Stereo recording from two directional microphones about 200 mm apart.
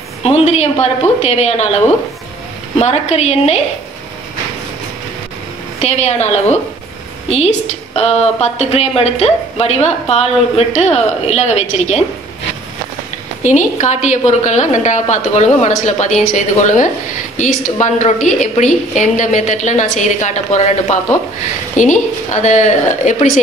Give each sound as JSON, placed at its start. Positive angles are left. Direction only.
{"t": 0.2, "sound": "a woman's voice", "side_deg": 30}
{"t": 5.8, "sound": "a woman's voice", "side_deg": 35}
{"t": 13.4, "sound": "a woman's voice", "side_deg": 35}